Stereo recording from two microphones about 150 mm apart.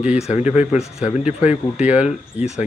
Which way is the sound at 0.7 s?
5° right (ahead or behind).